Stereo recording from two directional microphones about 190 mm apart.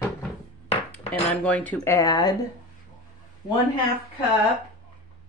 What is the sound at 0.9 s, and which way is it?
Speech, 5° left (ahead or behind).